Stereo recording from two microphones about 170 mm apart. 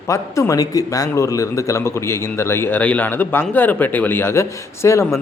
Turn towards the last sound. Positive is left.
turn(degrees=15)  # may be behind; listen again after turning